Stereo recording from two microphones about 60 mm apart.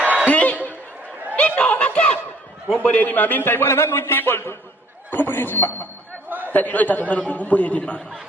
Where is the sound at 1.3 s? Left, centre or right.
Left.